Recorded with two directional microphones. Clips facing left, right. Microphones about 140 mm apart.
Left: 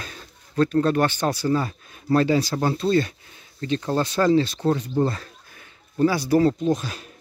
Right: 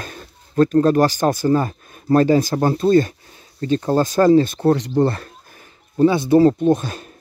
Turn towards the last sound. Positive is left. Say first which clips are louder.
# right 6 dB
turn(degrees=-50)  # may be behind; listen again after turning